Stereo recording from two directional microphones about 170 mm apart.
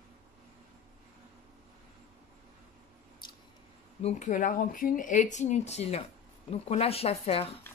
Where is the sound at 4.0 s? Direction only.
45° left (ahead or behind).